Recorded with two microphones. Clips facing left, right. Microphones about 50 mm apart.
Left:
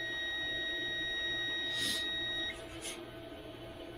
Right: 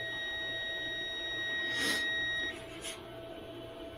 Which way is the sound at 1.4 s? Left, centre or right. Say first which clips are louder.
Right 2 dB; right.